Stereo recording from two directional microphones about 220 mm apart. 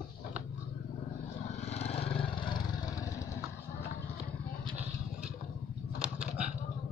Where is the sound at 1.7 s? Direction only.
30° left (ahead or behind).